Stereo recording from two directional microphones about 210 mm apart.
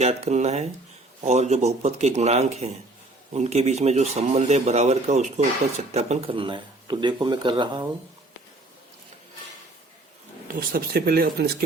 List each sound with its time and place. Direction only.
0.0 s speech: 30° right (ahead or behind)
10.5 s speech: 45° right (ahead or behind)